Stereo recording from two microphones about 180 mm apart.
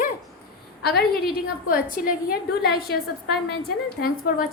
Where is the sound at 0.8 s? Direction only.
60° left (ahead or behind).